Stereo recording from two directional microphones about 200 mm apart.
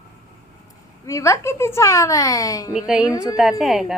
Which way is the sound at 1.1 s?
15° left (ahead or behind).